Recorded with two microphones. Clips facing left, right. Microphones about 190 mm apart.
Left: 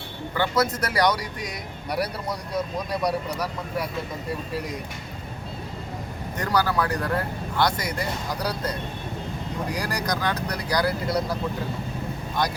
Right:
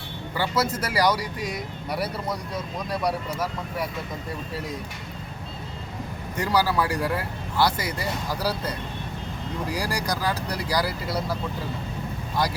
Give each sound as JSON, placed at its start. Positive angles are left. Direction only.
{"t": 0.3, "sound": "speech", "side_deg": -5}
{"t": 6.3, "sound": "speech", "side_deg": -10}
{"t": 9.6, "sound": "speech", "side_deg": -10}